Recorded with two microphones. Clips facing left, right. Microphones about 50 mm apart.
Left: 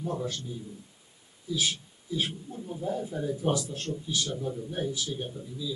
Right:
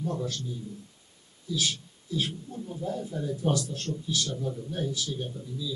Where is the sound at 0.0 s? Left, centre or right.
Centre.